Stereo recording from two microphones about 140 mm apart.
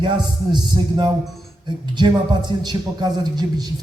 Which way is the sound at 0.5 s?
30° right (ahead or behind).